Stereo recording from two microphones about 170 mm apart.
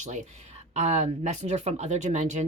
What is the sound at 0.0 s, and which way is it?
Speech, 45° right (ahead or behind).